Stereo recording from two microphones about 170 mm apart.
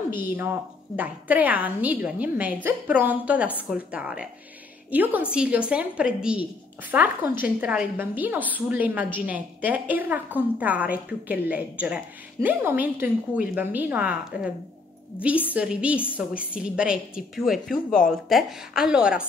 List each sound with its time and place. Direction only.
0.9 s a woman's voice: 10° right (ahead or behind)
15.5 s a woman's voice: 5° right (ahead or behind)